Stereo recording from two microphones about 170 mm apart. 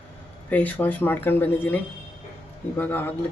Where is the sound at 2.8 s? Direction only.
10° left (ahead or behind).